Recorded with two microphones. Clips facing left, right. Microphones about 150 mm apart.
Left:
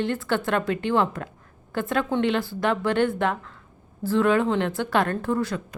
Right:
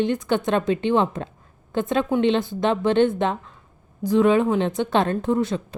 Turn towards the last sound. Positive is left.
turn(degrees=-20)  # may be behind; listen again after turning